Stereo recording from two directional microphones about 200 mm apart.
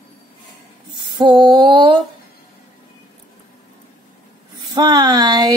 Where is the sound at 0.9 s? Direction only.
20° right (ahead or behind).